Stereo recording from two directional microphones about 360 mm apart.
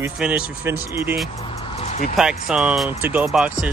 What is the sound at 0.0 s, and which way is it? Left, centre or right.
Speech, centre.